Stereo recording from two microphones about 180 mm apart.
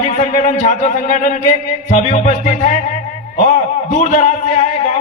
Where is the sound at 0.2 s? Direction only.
45° left (ahead or behind).